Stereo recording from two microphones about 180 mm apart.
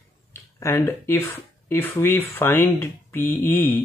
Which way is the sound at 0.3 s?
15° left (ahead or behind).